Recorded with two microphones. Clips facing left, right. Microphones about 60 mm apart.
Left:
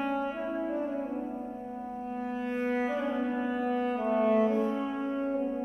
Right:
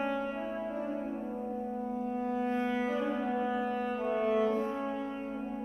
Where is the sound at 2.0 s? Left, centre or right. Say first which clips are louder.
Right 1 dB; left.